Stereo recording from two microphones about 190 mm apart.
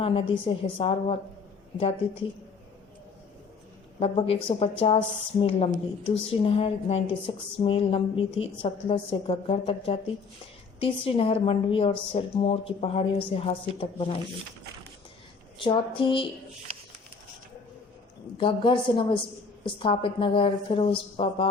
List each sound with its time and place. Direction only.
0.0 s a woman's voice: 30° left (ahead or behind)
4.0 s a woman's voice: 30° left (ahead or behind)
15.5 s a woman's voice: 25° left (ahead or behind)
18.3 s a woman's voice: 25° left (ahead or behind)